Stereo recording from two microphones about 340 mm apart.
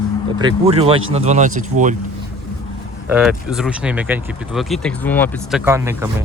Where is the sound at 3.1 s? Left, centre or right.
Centre.